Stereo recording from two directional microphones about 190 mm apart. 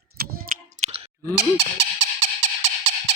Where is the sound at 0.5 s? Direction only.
35° right (ahead or behind).